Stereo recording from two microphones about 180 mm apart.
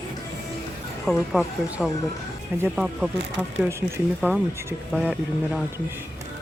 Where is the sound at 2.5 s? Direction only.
10° right (ahead or behind).